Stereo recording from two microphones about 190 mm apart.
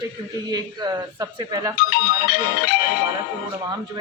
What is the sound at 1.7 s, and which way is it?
Music, 55° left (ahead or behind).